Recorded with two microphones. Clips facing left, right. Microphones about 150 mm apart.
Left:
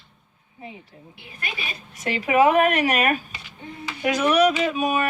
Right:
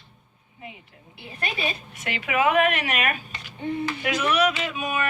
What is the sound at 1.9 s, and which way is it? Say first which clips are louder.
Speech: left 11 dB; 35° left (ahead or behind).